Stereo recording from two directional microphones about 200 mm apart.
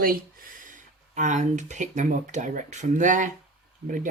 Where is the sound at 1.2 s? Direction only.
35° right (ahead or behind).